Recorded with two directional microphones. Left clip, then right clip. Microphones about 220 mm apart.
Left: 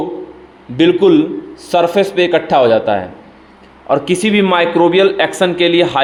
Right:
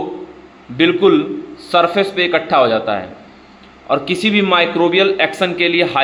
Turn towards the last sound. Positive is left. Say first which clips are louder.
# left 3 dB
turn(degrees=15)  # may be behind; listen again after turning